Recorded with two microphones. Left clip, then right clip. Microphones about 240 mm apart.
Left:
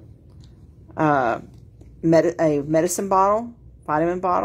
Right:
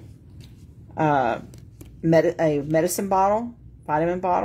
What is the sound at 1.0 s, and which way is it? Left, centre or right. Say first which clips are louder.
Speech: left 2 dB; centre.